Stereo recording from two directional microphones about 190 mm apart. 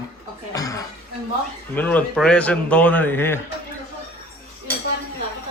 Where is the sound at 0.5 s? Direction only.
20° left (ahead or behind).